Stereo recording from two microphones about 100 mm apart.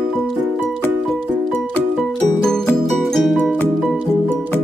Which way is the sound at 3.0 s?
Centre (ahead or behind).